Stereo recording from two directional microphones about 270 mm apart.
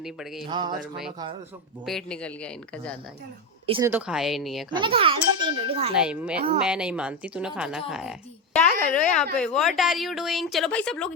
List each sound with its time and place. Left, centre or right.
0.0 s speech: centre
0.4 s a sound: centre
1.8 s speech: centre
3.8 s speech: centre
4.7 s a child's voice: centre
5.9 s speech: centre